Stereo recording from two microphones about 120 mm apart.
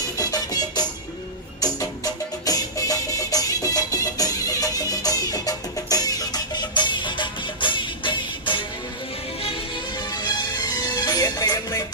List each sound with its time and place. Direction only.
0.2 s music: 30° left (ahead or behind)
9.9 s music: 35° left (ahead or behind)